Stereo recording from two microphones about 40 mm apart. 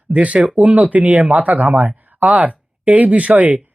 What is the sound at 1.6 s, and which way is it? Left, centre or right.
Speech, right.